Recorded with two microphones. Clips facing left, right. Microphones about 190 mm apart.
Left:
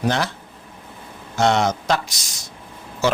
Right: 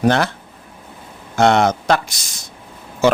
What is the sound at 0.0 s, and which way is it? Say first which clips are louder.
Speech: right 6 dB; 55° right (ahead or behind).